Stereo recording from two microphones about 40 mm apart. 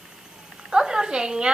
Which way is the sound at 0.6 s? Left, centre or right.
Centre.